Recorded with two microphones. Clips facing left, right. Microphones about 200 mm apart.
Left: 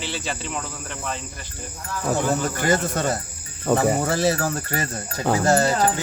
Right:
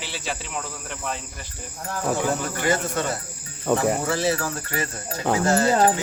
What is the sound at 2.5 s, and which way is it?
Speech, 40° left (ahead or behind).